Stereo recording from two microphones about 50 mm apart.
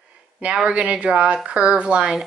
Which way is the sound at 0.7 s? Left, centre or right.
Right.